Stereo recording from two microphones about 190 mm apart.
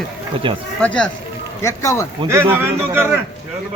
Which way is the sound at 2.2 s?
10° right (ahead or behind).